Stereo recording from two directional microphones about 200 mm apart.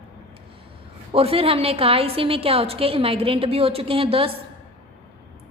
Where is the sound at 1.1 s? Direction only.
30° right (ahead or behind).